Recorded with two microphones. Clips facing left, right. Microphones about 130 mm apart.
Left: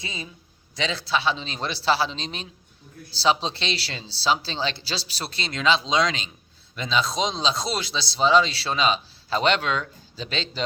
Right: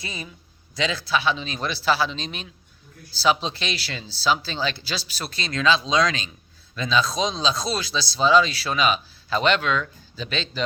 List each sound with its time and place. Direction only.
0.0 s a man's voice: 20° left (ahead or behind)